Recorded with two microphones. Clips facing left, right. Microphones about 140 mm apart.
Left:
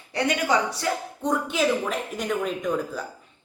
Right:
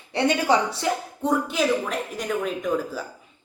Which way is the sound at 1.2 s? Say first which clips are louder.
Right 1 dB; 5° right (ahead or behind).